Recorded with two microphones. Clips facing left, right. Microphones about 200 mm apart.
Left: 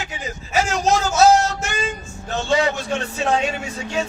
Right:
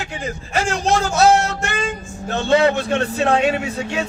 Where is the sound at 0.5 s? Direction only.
60° right (ahead or behind).